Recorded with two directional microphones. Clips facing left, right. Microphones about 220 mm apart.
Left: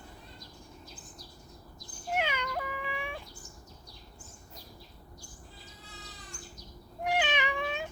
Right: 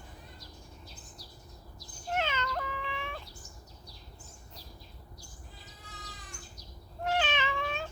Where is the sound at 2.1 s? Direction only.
10° left (ahead or behind).